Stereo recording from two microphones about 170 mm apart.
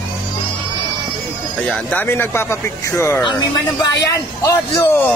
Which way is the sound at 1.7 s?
10° left (ahead or behind).